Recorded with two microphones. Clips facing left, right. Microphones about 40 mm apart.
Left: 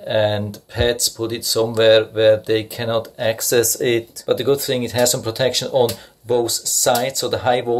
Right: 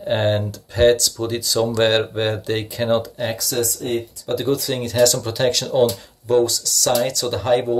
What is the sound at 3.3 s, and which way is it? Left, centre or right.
Speech, left.